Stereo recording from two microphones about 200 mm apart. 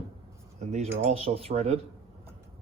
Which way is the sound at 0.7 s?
30° right (ahead or behind).